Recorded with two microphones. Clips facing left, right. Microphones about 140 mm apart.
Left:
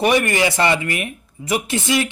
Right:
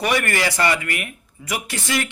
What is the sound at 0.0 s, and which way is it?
Speech, 20° left (ahead or behind).